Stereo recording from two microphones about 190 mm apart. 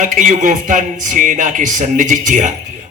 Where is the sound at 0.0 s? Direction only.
40° right (ahead or behind).